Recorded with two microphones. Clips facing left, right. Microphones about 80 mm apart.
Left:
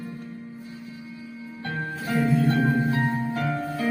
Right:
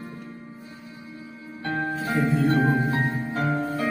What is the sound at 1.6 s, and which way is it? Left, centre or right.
Music, right.